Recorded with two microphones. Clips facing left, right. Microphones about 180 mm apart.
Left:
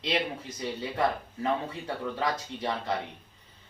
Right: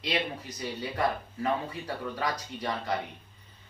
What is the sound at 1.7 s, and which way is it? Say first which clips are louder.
Speech: left 1 dB; 25° left (ahead or behind).